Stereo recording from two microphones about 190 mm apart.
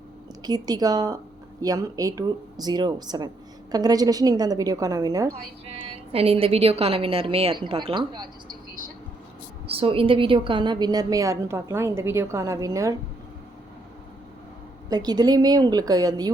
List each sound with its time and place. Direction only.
0.4 s a woman's voice: 20° right (ahead or behind)
5.6 s a woman's voice: 30° right (ahead or behind)
9.6 s a woman's voice: 30° right (ahead or behind)
14.8 s a woman's voice: 20° right (ahead or behind)